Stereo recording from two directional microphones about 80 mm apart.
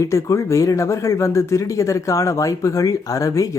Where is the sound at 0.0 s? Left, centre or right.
Left.